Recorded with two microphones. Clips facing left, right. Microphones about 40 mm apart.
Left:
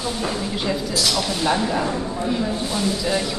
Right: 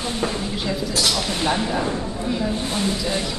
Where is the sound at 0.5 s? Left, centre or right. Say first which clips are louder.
Left 1 dB; centre.